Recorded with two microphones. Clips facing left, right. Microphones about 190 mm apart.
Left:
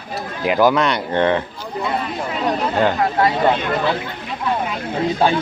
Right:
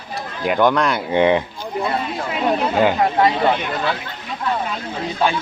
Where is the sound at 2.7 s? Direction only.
5° right (ahead or behind).